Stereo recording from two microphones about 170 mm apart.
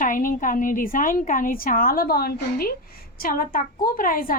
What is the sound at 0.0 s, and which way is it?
A woman's voice, 55° left (ahead or behind).